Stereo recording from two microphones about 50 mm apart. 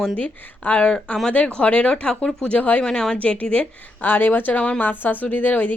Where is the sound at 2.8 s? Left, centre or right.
Centre.